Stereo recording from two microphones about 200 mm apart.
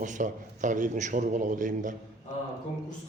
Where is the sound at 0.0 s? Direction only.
40° right (ahead or behind).